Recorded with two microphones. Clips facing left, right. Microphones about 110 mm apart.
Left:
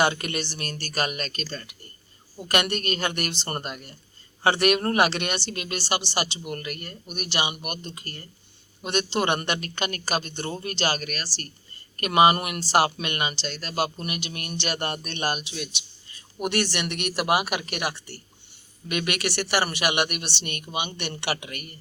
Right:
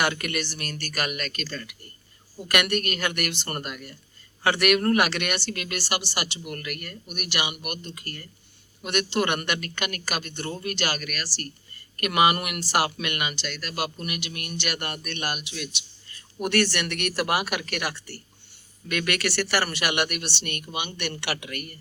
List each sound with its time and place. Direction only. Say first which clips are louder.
0.0 s speech: left 2 dB; 25° left (ahead or behind)